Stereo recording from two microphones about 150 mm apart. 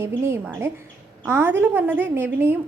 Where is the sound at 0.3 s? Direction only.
15° right (ahead or behind).